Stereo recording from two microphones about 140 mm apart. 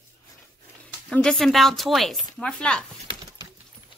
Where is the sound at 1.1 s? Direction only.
5° left (ahead or behind).